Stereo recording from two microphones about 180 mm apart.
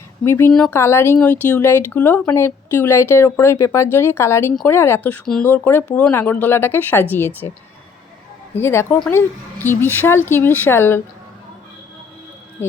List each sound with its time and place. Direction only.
0.3 s speech: 15° left (ahead or behind)
8.5 s speech: 15° left (ahead or behind)